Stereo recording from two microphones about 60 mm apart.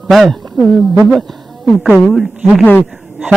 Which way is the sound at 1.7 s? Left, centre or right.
Centre.